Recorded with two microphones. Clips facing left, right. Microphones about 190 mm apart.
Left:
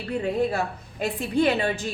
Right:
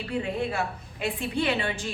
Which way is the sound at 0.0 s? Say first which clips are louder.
Left 4 dB; 40° left (ahead or behind).